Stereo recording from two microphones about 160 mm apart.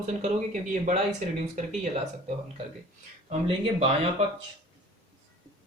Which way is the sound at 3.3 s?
35° right (ahead or behind).